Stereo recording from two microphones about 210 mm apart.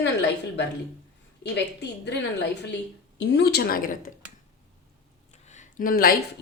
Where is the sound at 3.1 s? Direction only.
55° left (ahead or behind).